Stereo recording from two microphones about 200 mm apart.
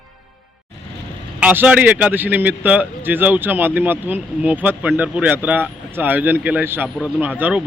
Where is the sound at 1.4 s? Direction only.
5° right (ahead or behind).